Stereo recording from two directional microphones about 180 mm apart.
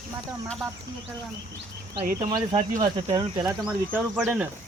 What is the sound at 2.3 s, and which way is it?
Cricket, 25° right (ahead or behind).